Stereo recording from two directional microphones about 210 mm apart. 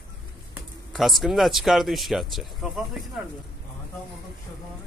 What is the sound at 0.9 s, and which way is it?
Speech, centre (ahead or behind).